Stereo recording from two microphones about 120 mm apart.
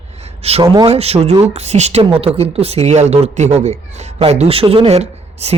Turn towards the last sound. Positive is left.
turn(degrees=-60)  # may be behind; listen again after turning